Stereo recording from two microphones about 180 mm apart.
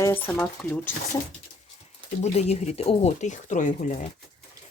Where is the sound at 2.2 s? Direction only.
35° left (ahead or behind).